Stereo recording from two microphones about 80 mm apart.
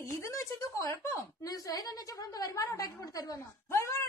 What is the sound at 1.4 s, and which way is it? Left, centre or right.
A woman's voice, left.